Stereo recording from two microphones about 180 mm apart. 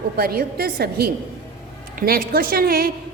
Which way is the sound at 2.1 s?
55° right (ahead or behind).